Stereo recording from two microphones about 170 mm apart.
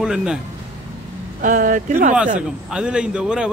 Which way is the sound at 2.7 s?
5° right (ahead or behind).